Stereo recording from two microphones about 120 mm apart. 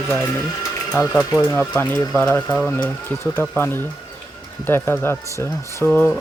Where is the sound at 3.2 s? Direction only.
20° left (ahead or behind).